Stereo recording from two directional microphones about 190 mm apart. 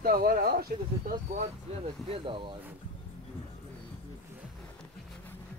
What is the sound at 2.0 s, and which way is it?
Speech, 30° right (ahead or behind).